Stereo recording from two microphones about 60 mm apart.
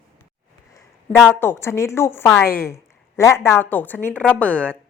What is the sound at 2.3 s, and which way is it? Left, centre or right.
Speech, left.